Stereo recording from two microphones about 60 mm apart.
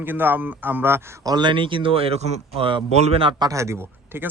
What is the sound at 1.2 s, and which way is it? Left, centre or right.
Speech, right.